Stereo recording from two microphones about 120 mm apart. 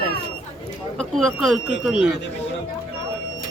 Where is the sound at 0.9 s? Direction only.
5° left (ahead or behind).